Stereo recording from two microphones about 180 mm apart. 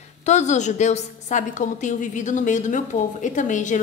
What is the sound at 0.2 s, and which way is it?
A woman's voice, 40° left (ahead or behind).